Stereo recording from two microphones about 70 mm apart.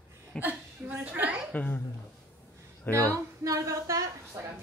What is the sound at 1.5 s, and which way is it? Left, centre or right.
Speech, left.